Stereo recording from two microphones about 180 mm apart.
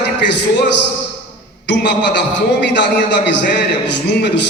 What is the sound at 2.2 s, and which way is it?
Speech, 70° left (ahead or behind).